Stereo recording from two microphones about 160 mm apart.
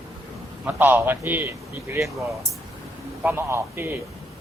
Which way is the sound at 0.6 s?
10° right (ahead or behind).